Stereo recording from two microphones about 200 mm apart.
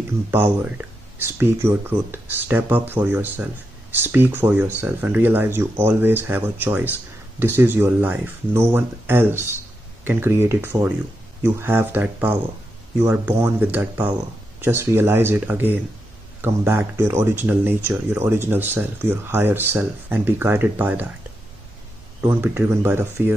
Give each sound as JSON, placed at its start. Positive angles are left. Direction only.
{"t": 0.3, "sound": "speech", "side_deg": -10}
{"t": 22.2, "sound": "speech", "side_deg": -10}